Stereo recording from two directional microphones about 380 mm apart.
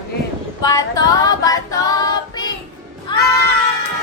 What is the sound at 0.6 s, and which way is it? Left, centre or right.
Female singing, centre.